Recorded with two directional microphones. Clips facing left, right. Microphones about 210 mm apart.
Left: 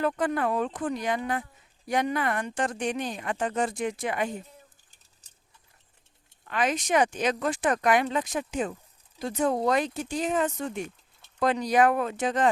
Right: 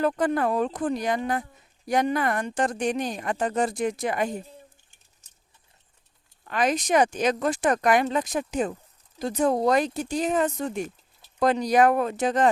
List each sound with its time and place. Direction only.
0.0 s speech: 35° right (ahead or behind)
6.4 s speech: 40° right (ahead or behind)